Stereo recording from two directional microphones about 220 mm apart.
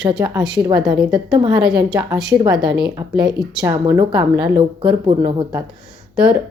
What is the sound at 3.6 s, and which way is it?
A woman's voice, 15° right (ahead or behind).